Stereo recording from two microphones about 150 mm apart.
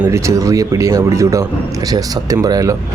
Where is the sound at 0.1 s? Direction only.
20° right (ahead or behind).